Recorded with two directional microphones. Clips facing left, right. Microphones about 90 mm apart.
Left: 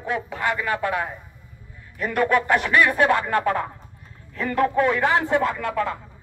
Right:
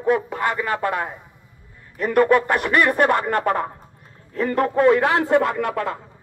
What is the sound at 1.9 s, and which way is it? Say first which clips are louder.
Speech: right 4 dB; 45° right (ahead or behind).